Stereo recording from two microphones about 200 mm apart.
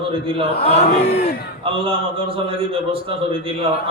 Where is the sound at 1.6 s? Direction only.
25° right (ahead or behind).